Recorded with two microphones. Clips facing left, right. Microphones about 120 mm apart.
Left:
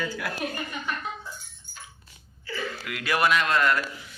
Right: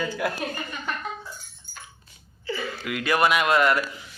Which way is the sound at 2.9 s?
Centre (ahead or behind).